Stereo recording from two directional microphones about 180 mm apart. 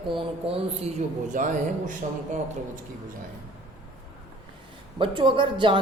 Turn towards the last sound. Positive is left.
turn(degrees=-25)  # may be behind; listen again after turning